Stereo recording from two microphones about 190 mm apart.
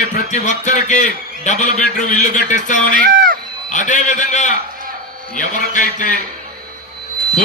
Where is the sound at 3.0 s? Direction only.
45° right (ahead or behind).